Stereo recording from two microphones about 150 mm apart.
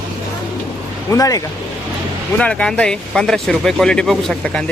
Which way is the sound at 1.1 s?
25° left (ahead or behind).